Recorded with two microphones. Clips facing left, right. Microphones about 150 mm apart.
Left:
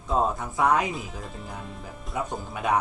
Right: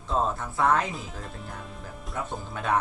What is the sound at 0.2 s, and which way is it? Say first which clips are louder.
Speech: left 1 dB; 15° left (ahead or behind).